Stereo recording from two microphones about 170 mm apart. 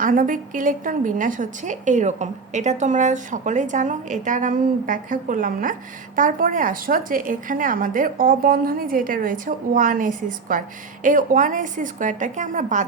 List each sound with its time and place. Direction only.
0.0 s a woman's voice: 50° right (ahead or behind)